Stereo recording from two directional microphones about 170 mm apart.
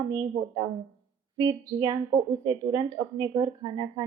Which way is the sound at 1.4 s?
25° right (ahead or behind).